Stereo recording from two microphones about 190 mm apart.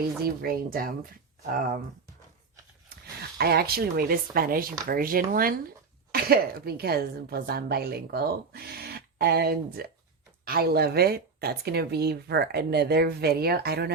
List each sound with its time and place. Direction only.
0.4 s speech: 50° right (ahead or behind)
3.3 s a woman's voice: 55° right (ahead or behind)